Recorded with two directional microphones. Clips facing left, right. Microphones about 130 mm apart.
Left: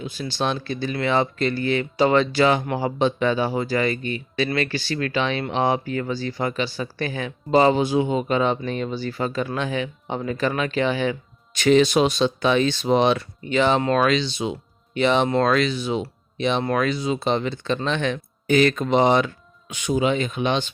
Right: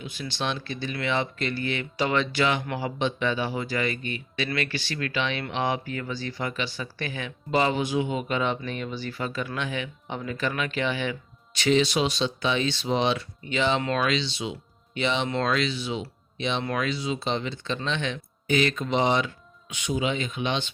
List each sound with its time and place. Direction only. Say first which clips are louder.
0.0 s speech: left 6 dB; 35° left (ahead or behind)